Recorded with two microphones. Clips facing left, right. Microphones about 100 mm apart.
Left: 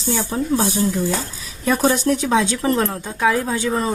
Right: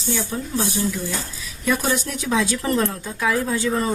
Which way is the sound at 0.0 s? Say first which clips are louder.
Left 4 dB; 35° left (ahead or behind).